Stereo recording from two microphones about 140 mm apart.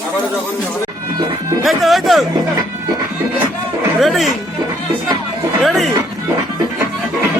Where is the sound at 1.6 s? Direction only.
Centre (ahead or behind).